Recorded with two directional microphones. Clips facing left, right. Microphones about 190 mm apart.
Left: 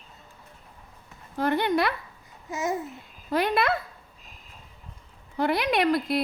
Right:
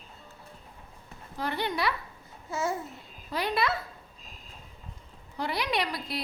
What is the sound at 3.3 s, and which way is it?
Speech, 55° left (ahead or behind).